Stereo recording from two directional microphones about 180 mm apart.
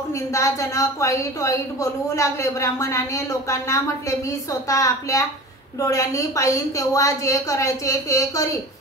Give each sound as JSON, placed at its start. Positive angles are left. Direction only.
{"t": 0.3, "sound": "a woman's voice", "side_deg": 15}